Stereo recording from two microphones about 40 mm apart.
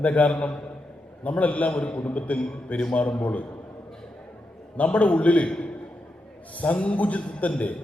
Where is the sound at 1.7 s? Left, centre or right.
Left.